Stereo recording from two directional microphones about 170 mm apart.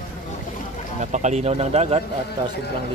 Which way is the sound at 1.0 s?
45° right (ahead or behind).